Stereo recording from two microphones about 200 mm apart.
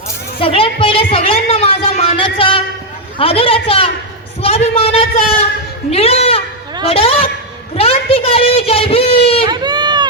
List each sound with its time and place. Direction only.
0.3 s a woman's voice: 25° left (ahead or behind)
7.8 s a sound: 30° left (ahead or behind)
9.5 s baby cry: 20° right (ahead or behind)